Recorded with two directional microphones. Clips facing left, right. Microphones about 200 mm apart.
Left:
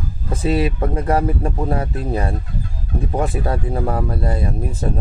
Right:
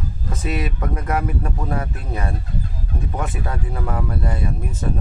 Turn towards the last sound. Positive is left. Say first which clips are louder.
# left 3 dB
turn(degrees=35)  # may be behind; listen again after turning